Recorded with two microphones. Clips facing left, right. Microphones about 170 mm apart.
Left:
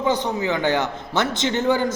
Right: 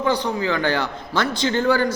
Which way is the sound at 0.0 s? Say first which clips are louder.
Even; 20° left (ahead or behind).